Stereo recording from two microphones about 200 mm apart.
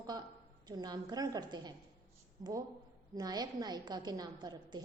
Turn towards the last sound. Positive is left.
turn(degrees=-20)  # may be behind; listen again after turning